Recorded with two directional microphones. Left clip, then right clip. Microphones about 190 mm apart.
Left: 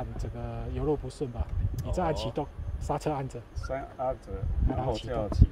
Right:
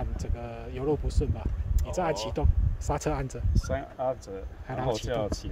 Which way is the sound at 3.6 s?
45° right (ahead or behind).